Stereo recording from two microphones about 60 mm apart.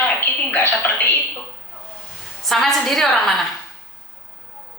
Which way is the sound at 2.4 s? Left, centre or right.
Centre.